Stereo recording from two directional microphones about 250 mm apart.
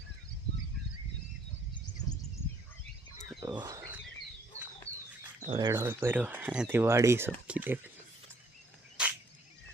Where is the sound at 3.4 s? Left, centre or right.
Centre.